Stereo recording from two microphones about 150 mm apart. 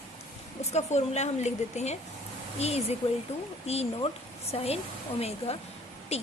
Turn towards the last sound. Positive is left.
turn(degrees=45)  # may be behind; listen again after turning